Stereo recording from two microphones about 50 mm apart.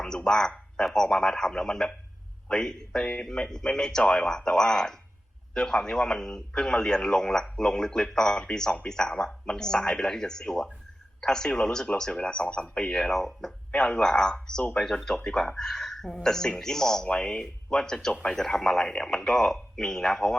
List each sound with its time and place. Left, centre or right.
0.0 s speech: centre
13.1 s speech: centre
13.7 s speech: centre